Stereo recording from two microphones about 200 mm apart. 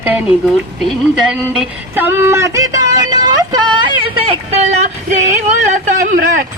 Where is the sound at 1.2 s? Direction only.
5° right (ahead or behind); by 4.3 s 25° right (ahead or behind).